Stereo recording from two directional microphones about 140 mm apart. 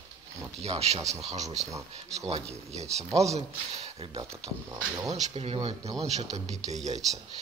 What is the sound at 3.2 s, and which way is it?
Speech, 50° right (ahead or behind).